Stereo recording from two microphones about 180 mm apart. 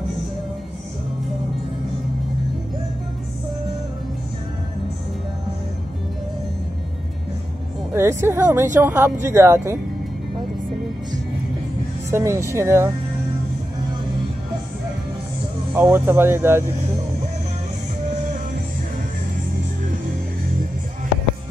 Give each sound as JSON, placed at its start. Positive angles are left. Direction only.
{"t": 7.9, "sound": "speech", "side_deg": -15}
{"t": 12.1, "sound": "speech", "side_deg": -15}
{"t": 15.7, "sound": "speech", "side_deg": -10}